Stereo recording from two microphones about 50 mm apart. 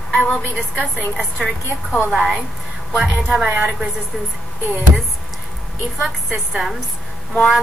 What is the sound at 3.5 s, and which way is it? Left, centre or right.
Speech, right.